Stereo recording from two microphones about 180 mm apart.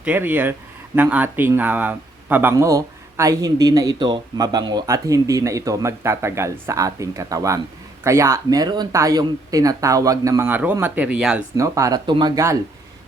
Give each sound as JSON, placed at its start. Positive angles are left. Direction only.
{"t": 0.0, "sound": "speech", "side_deg": -10}
{"t": 11.5, "sound": "speech", "side_deg": -15}